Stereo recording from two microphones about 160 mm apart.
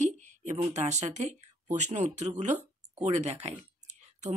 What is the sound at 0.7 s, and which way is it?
Speech, 45° right (ahead or behind).